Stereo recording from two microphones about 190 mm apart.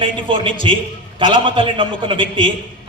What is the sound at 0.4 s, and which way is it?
A man's voice, 25° right (ahead or behind).